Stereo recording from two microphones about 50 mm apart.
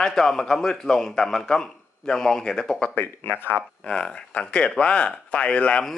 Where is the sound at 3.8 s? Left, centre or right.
Centre.